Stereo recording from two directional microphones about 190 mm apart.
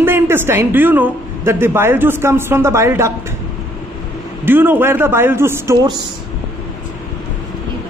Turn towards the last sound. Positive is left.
turn(degrees=-15)  # may be behind; listen again after turning